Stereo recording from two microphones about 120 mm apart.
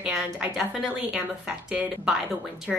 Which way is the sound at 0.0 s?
5° right (ahead or behind).